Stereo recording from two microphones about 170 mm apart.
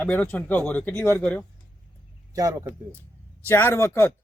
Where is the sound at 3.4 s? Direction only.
10° left (ahead or behind).